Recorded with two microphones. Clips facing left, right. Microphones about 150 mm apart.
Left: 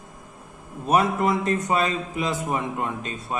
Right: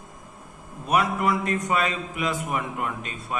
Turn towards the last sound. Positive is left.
turn(degrees=30)  # may be behind; listen again after turning